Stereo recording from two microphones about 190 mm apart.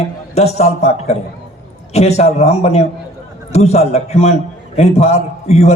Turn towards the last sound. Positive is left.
turn(degrees=35)  # may be behind; listen again after turning